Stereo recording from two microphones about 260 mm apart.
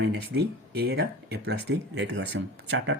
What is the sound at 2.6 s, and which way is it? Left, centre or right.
Speech, right.